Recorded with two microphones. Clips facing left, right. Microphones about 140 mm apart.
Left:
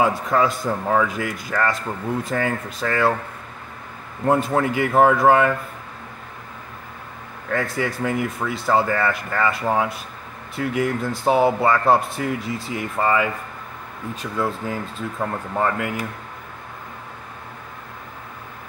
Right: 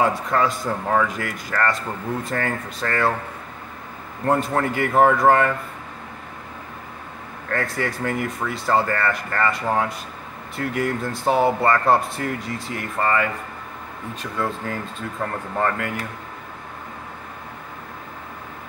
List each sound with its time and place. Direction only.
0.0 s speech: 5° left (ahead or behind)
4.2 s speech: 5° left (ahead or behind)
7.4 s speech: 5° left (ahead or behind)
10.6 s speech: 20° left (ahead or behind)
10.9 s speech: centre (ahead or behind)
14.4 s speech: 10° left (ahead or behind)